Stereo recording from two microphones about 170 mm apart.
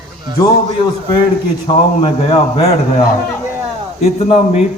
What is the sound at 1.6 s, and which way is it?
A man's voice, 35° left (ahead or behind).